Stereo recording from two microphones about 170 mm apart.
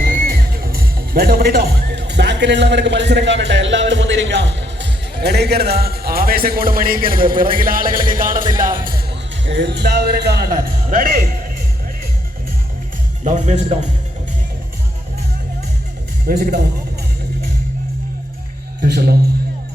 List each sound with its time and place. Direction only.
0.0 s speech: 60° right (ahead or behind)
9.5 s speech: 85° right; by 10.4 s 70° right (ahead or behind)
10.8 s speech: 55° right (ahead or behind)
13.2 s speech: 45° right (ahead or behind)
16.2 s speech: 65° right (ahead or behind)
18.8 s a sound: 60° right (ahead or behind)